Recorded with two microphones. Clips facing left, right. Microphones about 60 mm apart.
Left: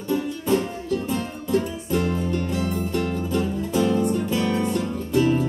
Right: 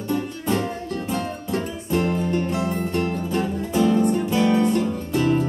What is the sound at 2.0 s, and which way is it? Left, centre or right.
Music, right.